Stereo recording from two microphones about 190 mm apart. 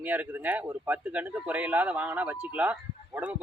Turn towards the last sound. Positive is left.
turn(degrees=-10)  # may be behind; listen again after turning